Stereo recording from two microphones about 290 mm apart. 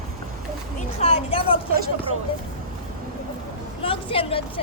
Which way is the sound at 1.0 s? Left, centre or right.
Centre.